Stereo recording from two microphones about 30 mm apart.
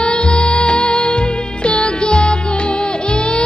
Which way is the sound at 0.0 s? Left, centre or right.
Left.